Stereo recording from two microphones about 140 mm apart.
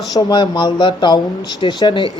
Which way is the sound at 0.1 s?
30° left (ahead or behind).